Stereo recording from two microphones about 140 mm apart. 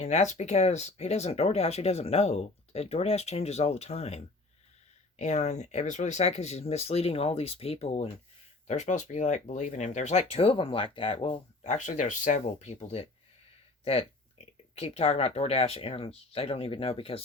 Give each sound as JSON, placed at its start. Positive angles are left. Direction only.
{"t": 0.0, "sound": "speech", "side_deg": 55}
{"t": 11.6, "sound": "speech", "side_deg": 60}
{"t": 12.8, "sound": "speech", "side_deg": 45}